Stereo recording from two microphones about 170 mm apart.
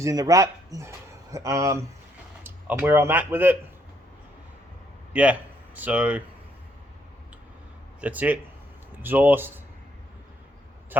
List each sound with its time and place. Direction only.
0.0 s speech: 20° right (ahead or behind)
5.1 s speech: 10° right (ahead or behind)
8.0 s speech: 10° right (ahead or behind)